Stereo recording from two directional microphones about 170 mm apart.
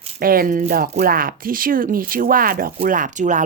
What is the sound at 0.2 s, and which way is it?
Speech, 55° right (ahead or behind).